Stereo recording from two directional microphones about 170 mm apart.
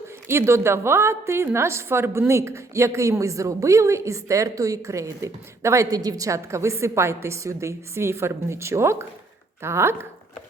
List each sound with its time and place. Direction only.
0.3 s a woman's voice: 15° right (ahead or behind)